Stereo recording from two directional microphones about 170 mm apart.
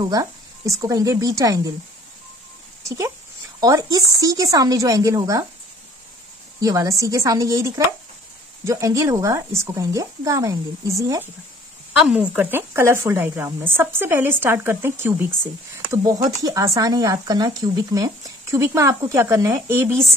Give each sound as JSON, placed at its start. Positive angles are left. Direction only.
{"t": 0.0, "sound": "speech", "side_deg": -25}
{"t": 3.6, "sound": "speech", "side_deg": -20}
{"t": 6.6, "sound": "speech", "side_deg": -20}
{"t": 11.9, "sound": "speech", "side_deg": -5}